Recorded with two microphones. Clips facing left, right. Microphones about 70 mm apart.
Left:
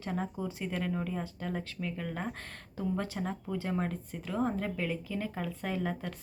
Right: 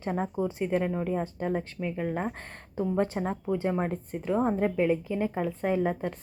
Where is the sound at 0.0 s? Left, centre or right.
Right.